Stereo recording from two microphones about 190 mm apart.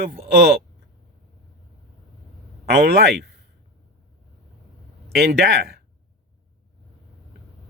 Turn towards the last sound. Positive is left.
turn(degrees=-55)  # may be behind; listen again after turning